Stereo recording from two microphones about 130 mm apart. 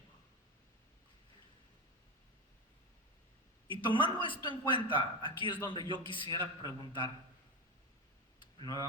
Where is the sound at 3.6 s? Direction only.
40° left (ahead or behind).